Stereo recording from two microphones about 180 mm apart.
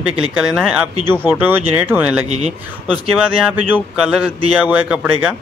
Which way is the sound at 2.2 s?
40° right (ahead or behind).